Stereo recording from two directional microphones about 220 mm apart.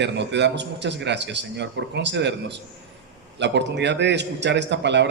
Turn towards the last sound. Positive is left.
turn(degrees=-50)  # may be behind; listen again after turning